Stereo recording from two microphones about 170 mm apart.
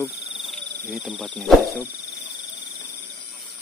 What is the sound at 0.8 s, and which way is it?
Speech, centre (ahead or behind).